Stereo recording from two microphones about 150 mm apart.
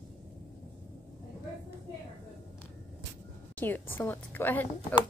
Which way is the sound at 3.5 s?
10° left (ahead or behind).